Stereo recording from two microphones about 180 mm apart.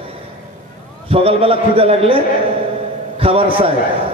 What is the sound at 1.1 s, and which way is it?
A man's voice, 30° right (ahead or behind).